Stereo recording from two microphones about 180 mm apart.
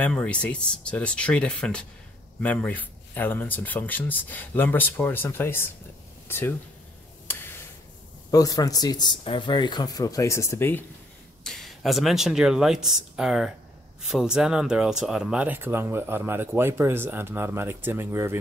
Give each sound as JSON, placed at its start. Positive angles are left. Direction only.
{"t": 0.0, "sound": "speech", "side_deg": 5}
{"t": 7.2, "sound": "tick", "side_deg": 10}
{"t": 8.3, "sound": "speech", "side_deg": 20}
{"t": 11.4, "sound": "speech", "side_deg": 0}